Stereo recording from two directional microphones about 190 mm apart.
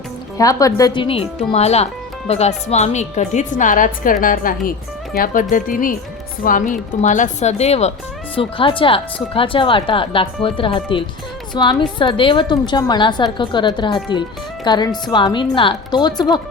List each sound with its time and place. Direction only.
0.3 s a woman's voice: 20° left (ahead or behind)